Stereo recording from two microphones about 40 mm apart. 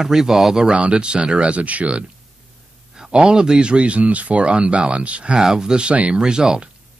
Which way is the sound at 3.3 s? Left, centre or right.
Centre.